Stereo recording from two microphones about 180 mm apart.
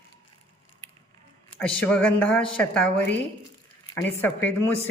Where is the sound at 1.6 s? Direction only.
5° left (ahead or behind).